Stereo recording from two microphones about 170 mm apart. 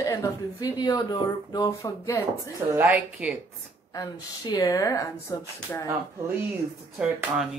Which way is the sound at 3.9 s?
20° left (ahead or behind).